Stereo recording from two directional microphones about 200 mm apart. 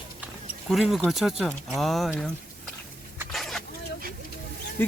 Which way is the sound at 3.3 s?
Centre (ahead or behind).